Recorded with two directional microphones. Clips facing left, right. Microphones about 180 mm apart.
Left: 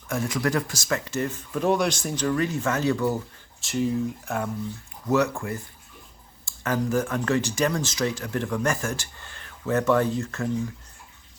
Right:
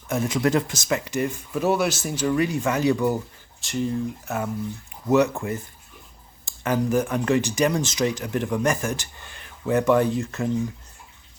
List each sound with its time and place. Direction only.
0.1 s speech: 20° right (ahead or behind)
3.6 s speech: centre (ahead or behind)
5.0 s speech: 20° right (ahead or behind)